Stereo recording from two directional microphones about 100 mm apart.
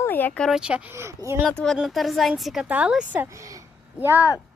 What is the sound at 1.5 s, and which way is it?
Speech, 10° left (ahead or behind).